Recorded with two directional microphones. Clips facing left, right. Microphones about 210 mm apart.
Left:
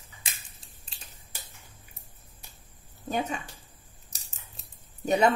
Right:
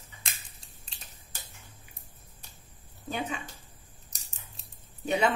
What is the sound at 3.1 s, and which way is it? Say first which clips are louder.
Speech: left 4 dB; 45° left (ahead or behind).